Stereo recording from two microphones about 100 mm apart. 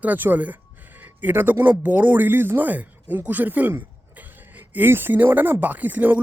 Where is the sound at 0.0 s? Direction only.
15° right (ahead or behind).